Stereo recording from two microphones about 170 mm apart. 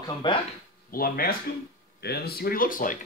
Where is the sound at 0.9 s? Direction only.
60° left (ahead or behind).